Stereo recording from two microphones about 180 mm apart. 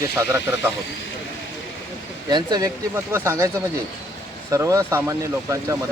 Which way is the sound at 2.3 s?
20° right (ahead or behind).